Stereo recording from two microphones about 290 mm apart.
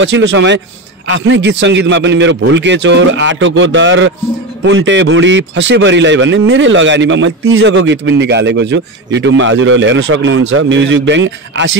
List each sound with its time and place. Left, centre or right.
0.0 s a man's voice: right